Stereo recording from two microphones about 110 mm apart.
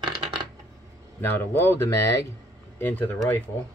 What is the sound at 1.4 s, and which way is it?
Speech, 20° left (ahead or behind).